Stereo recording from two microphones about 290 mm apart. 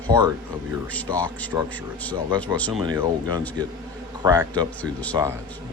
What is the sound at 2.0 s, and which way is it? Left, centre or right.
Speech, centre.